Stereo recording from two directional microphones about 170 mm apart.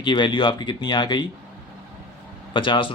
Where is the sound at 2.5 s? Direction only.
30° left (ahead or behind).